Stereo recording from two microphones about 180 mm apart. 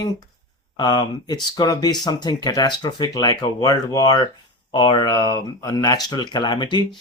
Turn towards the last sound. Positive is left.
turn(degrees=25)  # may be behind; listen again after turning